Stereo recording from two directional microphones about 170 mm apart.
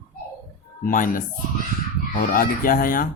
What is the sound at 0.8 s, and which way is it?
Speech, 55° left (ahead or behind).